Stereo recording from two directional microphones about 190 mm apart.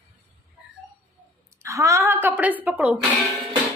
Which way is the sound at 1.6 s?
15° right (ahead or behind).